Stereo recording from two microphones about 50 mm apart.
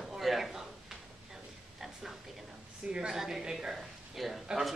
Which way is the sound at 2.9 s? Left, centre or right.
Centre.